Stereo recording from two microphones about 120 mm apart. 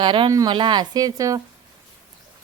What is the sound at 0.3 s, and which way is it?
Speech, 30° right (ahead or behind).